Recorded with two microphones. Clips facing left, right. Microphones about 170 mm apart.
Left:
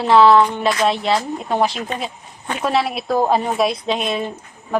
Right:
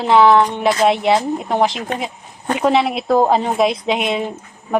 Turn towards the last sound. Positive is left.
turn(degrees=-15)  # may be behind; listen again after turning